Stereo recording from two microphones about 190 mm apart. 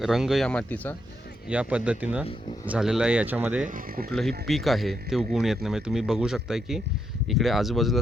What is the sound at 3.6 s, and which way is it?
Speech, 45° right (ahead or behind).